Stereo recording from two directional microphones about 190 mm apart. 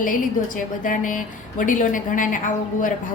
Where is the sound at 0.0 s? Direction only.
45° left (ahead or behind).